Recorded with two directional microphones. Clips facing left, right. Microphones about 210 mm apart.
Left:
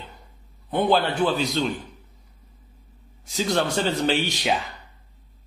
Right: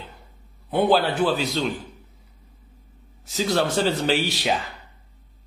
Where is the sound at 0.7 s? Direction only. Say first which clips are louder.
Right 2 dB; 10° right (ahead or behind).